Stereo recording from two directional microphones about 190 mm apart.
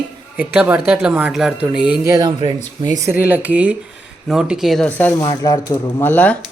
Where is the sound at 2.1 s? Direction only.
20° right (ahead or behind).